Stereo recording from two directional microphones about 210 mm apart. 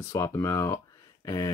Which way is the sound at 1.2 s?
15° left (ahead or behind).